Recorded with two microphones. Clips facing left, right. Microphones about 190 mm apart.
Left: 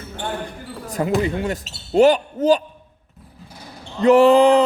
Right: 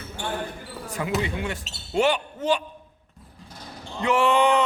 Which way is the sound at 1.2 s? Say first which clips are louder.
Left 6 dB; 40° left (ahead or behind).